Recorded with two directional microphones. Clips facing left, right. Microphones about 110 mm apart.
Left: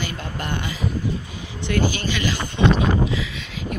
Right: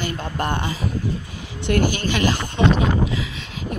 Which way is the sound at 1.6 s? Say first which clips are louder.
Right 2 dB; 55° right (ahead or behind).